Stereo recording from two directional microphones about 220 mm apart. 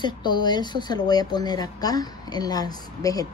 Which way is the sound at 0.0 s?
20° left (ahead or behind).